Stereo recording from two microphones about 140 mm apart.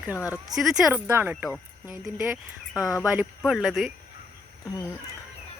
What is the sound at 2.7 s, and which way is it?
Speech, 25° left (ahead or behind).